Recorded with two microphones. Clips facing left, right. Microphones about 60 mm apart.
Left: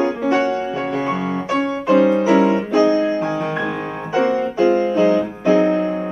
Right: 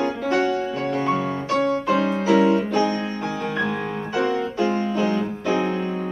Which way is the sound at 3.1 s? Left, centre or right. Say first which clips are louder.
Left 5 dB; centre.